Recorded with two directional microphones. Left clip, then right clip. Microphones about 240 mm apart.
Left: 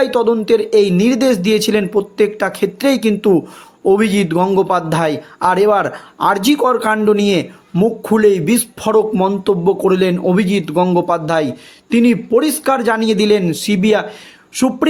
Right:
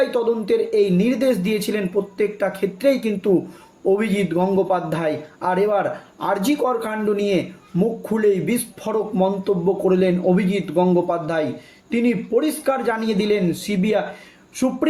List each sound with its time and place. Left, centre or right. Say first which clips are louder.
0.0 s a man's voice: left 6 dB; left